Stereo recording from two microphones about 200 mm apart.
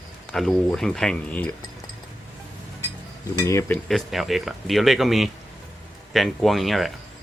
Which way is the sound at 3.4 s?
10° left (ahead or behind).